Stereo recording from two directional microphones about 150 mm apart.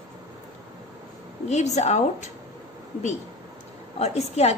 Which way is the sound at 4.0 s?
45° left (ahead or behind).